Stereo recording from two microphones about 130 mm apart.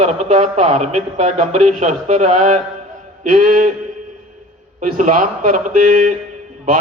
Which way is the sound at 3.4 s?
90° right.